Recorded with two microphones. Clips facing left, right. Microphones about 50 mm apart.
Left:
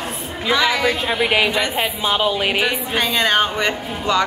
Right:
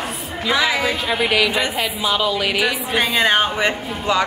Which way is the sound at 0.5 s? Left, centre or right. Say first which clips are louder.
Left 1 dB; centre.